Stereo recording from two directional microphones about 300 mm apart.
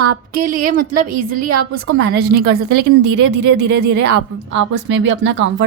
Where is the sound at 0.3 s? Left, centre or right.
Right.